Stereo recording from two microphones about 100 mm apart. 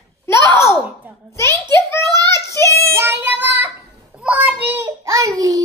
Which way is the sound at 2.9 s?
20° right (ahead or behind).